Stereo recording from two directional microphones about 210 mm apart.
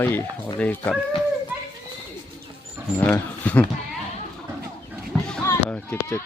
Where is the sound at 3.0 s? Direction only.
5° left (ahead or behind).